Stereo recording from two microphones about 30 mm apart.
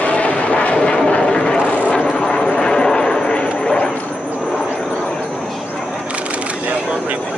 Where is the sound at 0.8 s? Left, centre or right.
Left.